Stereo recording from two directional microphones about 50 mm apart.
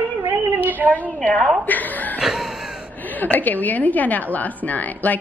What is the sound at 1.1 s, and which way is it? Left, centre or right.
A woman's voice, left.